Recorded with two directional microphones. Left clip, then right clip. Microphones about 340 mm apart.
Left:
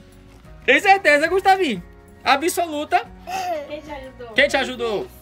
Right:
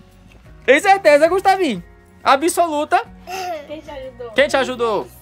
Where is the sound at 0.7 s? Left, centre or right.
Centre.